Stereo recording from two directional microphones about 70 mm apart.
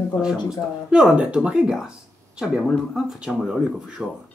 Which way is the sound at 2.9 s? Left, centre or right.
Centre.